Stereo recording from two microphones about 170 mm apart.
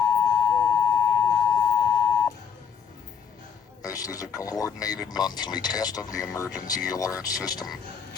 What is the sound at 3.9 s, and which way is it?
Speech, 20° left (ahead or behind).